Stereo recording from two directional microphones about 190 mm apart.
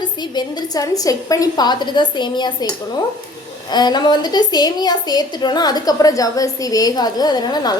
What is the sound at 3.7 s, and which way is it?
A woman's voice, 20° left (ahead or behind).